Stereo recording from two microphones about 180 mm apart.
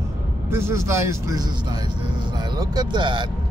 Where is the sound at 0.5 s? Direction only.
15° right (ahead or behind).